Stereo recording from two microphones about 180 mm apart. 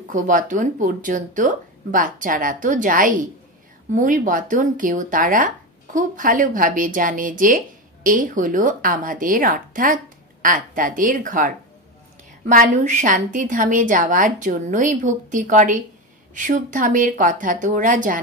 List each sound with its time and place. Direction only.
0.1 s a woman's voice: 45° right (ahead or behind)